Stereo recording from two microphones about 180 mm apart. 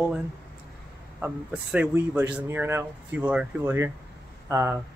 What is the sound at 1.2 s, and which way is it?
Speech, 10° right (ahead or behind).